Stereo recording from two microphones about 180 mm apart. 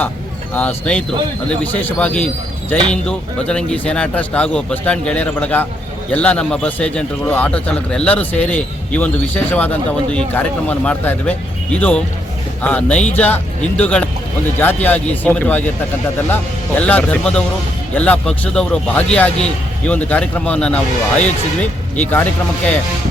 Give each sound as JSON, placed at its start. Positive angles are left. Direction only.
{"t": 0.5, "sound": "speech", "side_deg": 10}